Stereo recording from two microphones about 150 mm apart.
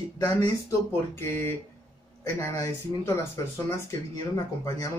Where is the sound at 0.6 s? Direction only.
15° left (ahead or behind).